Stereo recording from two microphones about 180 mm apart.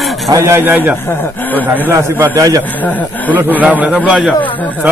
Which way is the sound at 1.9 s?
15° right (ahead or behind).